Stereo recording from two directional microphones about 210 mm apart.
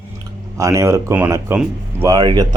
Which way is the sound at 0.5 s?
15° right (ahead or behind).